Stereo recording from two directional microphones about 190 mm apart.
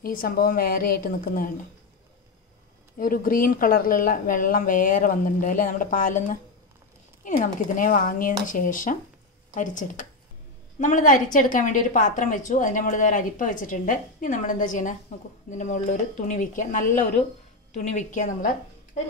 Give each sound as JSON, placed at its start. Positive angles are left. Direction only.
{"t": 0.0, "sound": "a woman's voice", "side_deg": 50}
{"t": 3.0, "sound": "a woman's voice", "side_deg": 50}